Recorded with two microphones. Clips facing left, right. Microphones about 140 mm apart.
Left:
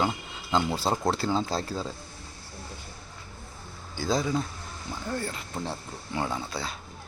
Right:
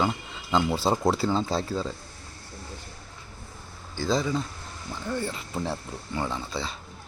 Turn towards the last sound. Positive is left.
turn(degrees=0)  # may be behind; listen again after turning